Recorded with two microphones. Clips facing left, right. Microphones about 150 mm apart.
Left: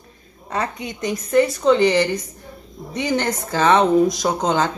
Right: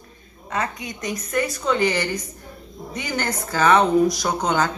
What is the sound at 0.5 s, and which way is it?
Speech, 30° left (ahead or behind).